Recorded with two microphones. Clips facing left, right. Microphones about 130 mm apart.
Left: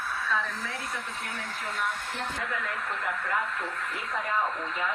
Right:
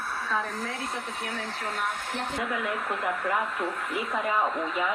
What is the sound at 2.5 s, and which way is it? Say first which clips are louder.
Speech: right 4 dB; 10° right (ahead or behind).